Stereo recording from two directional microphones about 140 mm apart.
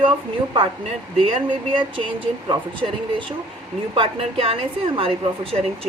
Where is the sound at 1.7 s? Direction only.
40° right (ahead or behind).